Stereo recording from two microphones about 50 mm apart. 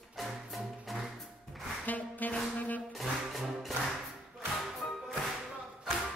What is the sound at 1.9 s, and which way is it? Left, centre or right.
Music, left.